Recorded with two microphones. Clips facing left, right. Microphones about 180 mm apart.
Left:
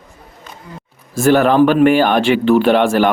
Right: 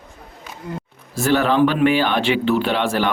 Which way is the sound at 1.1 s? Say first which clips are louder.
Left 6 dB; 50° left (ahead or behind).